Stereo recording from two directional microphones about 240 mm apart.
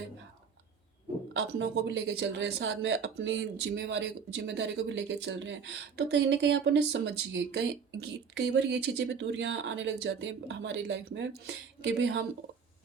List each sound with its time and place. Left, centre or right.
1.3 s speech: right